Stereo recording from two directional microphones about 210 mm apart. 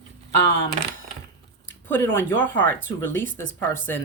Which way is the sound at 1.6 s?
10° left (ahead or behind).